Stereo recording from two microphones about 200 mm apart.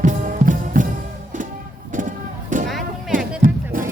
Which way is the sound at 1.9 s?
40° right (ahead or behind).